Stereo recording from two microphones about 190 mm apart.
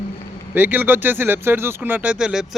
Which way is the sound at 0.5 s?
10° right (ahead or behind).